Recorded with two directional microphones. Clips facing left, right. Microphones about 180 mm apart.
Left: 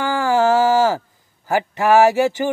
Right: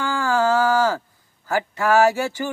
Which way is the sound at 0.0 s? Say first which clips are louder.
Left 4 dB; 15° left (ahead or behind).